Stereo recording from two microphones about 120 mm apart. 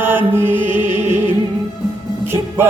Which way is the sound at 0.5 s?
45° left (ahead or behind).